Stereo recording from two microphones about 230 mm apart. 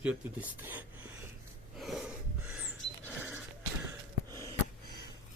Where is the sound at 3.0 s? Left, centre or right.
Centre.